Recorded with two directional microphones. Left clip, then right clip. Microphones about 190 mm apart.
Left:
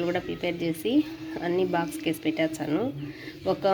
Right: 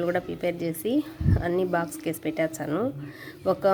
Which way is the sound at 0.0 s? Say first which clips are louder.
Right 2 dB; 15° right (ahead or behind).